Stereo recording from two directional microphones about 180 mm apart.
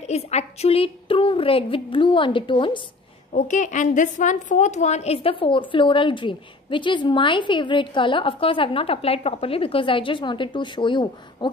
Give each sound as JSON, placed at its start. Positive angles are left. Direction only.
{"t": 0.1, "sound": "a woman's voice", "side_deg": 35}
{"t": 3.3, "sound": "a woman's voice", "side_deg": 40}